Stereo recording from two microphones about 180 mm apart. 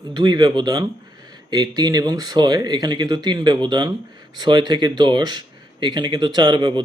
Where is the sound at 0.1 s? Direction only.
25° right (ahead or behind).